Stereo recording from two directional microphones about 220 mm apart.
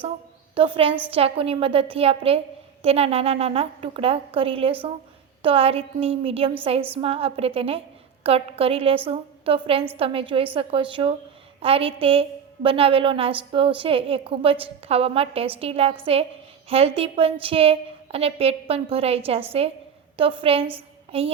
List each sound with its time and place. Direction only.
0.5 s a woman's voice: 25° right (ahead or behind)